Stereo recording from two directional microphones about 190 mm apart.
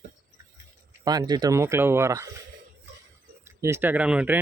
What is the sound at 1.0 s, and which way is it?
Speech, 20° right (ahead or behind).